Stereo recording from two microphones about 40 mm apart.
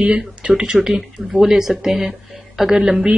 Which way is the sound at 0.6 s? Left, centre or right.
Centre.